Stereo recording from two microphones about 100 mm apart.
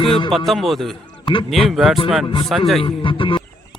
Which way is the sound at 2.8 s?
60° left (ahead or behind).